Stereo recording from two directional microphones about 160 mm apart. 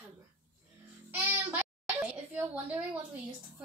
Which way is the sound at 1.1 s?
10° right (ahead or behind).